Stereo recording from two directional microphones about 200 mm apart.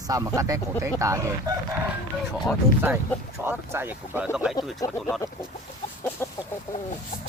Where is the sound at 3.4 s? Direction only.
10° right (ahead or behind).